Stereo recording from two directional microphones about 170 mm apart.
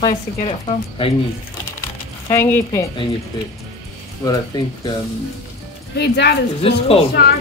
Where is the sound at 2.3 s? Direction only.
15° left (ahead or behind).